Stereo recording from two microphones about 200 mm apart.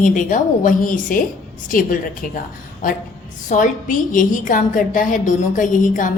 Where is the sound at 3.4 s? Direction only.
40° left (ahead or behind).